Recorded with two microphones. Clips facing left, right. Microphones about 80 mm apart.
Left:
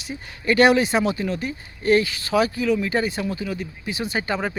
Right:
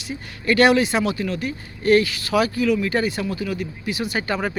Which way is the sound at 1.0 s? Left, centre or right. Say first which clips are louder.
Even; left.